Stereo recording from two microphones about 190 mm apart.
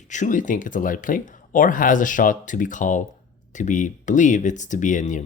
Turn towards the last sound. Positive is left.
turn(degrees=40)  # may be behind; listen again after turning